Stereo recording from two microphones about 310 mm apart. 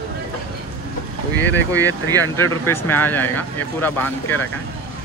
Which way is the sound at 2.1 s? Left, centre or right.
Centre.